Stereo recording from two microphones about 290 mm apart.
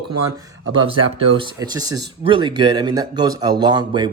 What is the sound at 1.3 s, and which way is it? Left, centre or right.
Speech, centre.